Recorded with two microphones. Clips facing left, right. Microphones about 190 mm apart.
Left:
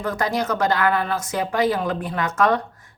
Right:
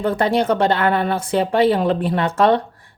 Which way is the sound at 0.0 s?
30° right (ahead or behind).